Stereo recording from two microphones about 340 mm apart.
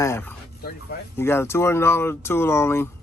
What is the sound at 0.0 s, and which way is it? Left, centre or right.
Speech, centre.